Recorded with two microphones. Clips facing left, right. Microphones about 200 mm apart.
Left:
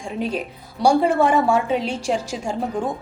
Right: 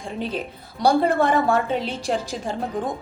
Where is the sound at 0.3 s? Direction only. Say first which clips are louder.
Left 2 dB; 10° left (ahead or behind).